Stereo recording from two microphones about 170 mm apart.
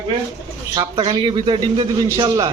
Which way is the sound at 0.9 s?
30° right (ahead or behind).